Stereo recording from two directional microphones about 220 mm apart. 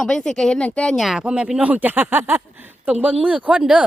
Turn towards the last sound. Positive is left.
turn(degrees=-5)  # may be behind; listen again after turning